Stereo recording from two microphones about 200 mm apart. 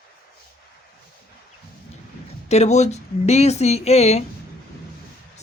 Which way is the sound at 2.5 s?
35° left (ahead or behind).